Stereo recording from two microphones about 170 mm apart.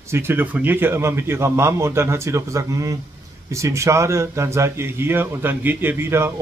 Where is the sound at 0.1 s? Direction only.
15° right (ahead or behind).